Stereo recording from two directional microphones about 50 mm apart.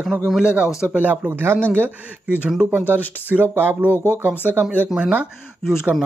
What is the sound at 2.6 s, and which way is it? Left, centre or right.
Speech, left.